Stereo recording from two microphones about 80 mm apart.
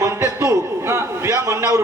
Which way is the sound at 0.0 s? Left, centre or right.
Right.